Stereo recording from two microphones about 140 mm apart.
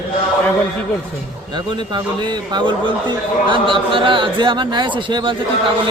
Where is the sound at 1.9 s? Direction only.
30° right (ahead or behind).